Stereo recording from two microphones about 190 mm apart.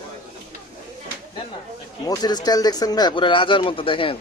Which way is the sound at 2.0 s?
20° left (ahead or behind).